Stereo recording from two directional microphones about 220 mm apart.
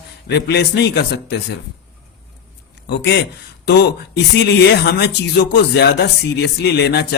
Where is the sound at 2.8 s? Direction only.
50° left (ahead or behind).